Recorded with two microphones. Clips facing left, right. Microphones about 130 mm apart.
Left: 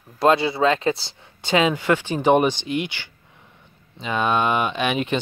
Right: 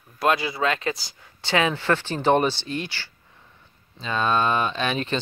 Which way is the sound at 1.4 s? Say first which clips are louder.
Left 3 dB; 20° left (ahead or behind).